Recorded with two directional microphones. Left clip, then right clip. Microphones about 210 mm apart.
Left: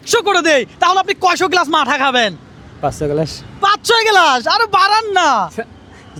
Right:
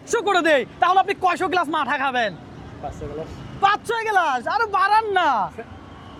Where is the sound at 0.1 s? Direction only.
35° left (ahead or behind).